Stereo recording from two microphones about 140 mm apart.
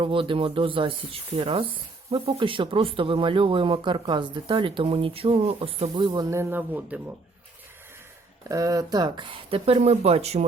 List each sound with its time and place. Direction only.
0.0 s speech: 40° right (ahead or behind)
6.1 s speech: 25° right (ahead or behind)
8.4 s speech: 25° right (ahead or behind); by 10.4 s 50° right (ahead or behind)